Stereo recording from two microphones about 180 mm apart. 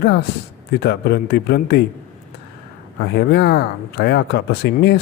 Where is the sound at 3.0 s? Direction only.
60° left (ahead or behind).